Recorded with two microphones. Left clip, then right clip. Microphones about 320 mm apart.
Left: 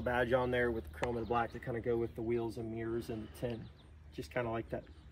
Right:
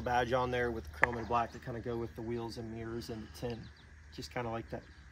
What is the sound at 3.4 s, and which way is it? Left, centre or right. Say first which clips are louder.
Speech: even; centre.